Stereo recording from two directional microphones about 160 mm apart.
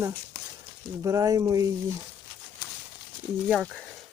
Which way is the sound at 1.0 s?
20° right (ahead or behind).